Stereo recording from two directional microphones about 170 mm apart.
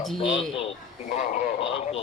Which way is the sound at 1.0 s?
45° left (ahead or behind).